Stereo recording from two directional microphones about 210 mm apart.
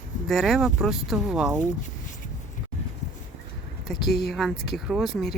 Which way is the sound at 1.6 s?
35° left (ahead or behind).